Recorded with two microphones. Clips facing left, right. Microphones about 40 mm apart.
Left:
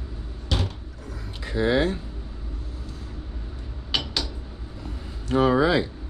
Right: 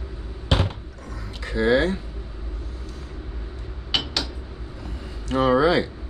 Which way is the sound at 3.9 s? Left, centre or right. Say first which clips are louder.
Right 2 dB; centre.